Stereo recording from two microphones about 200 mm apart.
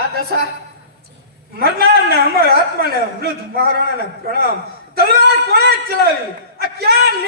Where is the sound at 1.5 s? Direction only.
50° right (ahead or behind).